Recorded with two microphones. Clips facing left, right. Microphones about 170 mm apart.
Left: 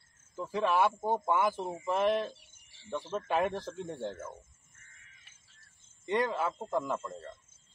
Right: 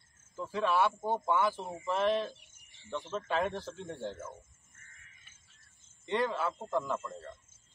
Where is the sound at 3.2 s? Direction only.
10° left (ahead or behind).